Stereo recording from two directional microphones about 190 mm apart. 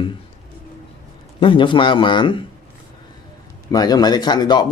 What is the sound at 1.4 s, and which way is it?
Speech, 25° left (ahead or behind).